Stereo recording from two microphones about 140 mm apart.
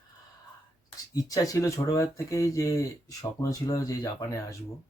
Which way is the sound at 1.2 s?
25° left (ahead or behind).